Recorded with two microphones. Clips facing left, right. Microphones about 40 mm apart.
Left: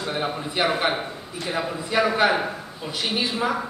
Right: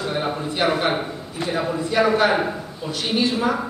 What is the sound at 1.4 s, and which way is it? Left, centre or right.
Speech, right.